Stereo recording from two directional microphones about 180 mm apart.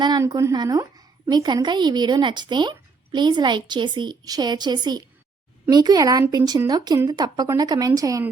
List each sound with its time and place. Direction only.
0.0 s a woman's voice: 25° right (ahead or behind)